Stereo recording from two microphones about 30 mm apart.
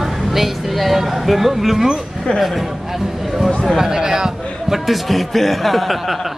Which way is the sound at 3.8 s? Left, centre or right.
Right.